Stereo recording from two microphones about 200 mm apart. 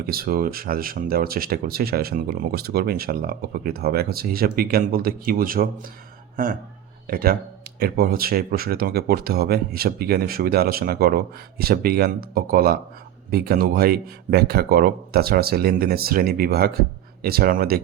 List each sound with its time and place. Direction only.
0.0 s speech: 50° right (ahead or behind)